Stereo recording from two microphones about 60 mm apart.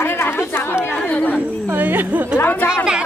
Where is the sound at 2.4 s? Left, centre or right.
Left.